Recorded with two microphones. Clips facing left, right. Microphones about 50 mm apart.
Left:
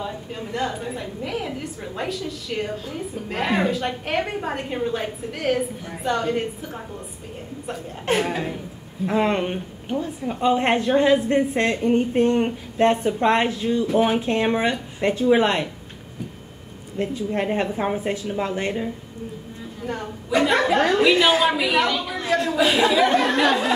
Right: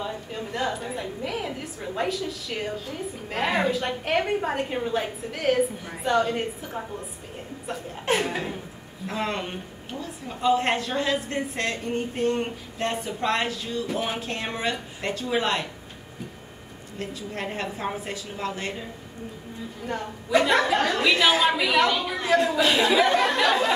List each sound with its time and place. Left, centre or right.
0.0 s a woman's voice: centre
9.0 s a woman's voice: left
17.0 s a woman's voice: left
19.9 s a woman's voice: centre
20.6 s a woman's voice: centre